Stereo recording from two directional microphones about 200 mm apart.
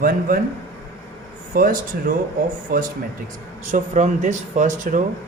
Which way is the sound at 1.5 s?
45° right (ahead or behind).